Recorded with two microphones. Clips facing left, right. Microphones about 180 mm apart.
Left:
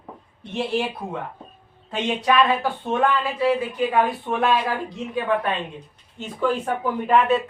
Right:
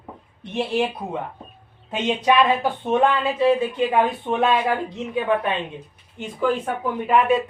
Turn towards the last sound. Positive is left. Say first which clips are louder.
# even
turn(degrees=-5)  # may be behind; listen again after turning